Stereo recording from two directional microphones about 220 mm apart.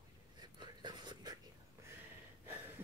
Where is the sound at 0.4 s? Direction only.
20° right (ahead or behind).